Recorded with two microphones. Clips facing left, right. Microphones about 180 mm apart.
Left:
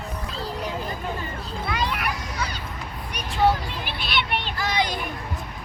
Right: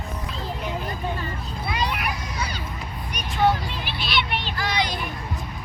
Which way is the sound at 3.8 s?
55° left (ahead or behind).